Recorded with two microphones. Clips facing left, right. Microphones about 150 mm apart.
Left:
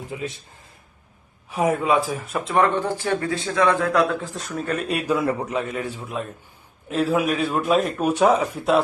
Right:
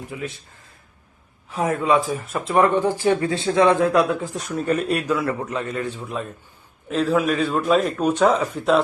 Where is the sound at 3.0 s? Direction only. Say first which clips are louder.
Right 4 dB; 20° right (ahead or behind).